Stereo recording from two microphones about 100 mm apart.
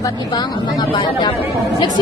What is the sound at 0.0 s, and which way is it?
Speech, 45° left (ahead or behind).